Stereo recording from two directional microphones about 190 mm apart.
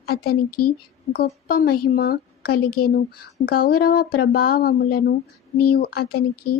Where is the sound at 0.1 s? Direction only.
55° left (ahead or behind).